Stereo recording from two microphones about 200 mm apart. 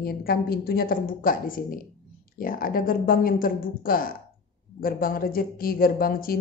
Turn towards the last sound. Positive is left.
turn(degrees=45)  # may be behind; listen again after turning